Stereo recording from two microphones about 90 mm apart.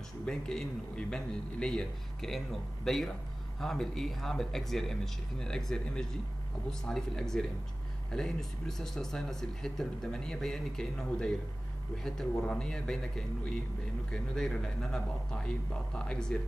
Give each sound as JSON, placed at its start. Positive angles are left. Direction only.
{"t": 0.2, "sound": "a man's voice", "side_deg": 5}
{"t": 14.1, "sound": "a man's voice", "side_deg": 5}